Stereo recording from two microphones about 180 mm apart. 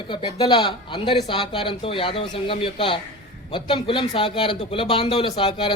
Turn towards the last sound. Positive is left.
turn(degrees=30)  # may be behind; listen again after turning